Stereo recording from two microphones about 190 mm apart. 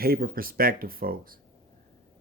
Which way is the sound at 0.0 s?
50° right (ahead or behind).